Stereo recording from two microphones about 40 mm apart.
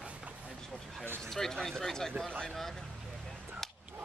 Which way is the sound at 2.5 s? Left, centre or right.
Centre.